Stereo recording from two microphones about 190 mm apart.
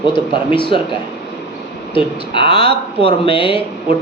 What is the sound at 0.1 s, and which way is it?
Speech, 25° left (ahead or behind).